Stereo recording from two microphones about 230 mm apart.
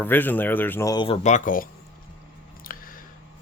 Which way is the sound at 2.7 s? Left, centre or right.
Left.